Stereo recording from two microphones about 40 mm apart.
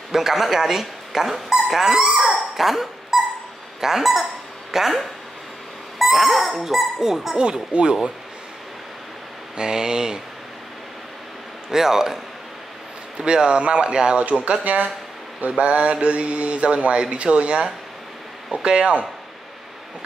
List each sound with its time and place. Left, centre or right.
0.1 s speech: centre
2.5 s dog: centre
3.8 s speech: centre
7.3 s speech: right
9.6 s speech: centre
11.7 s speech: centre
13.2 s speech: right
14.4 s mantra: right
17.0 s speech: right